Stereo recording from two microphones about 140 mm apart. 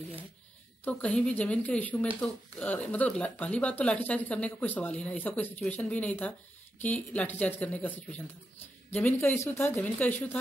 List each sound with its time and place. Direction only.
0.8 s speech: 10° left (ahead or behind)